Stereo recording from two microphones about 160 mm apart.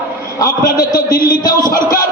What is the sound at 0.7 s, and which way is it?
Speech, 25° left (ahead or behind).